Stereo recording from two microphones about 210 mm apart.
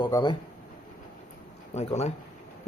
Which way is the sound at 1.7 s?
30° left (ahead or behind).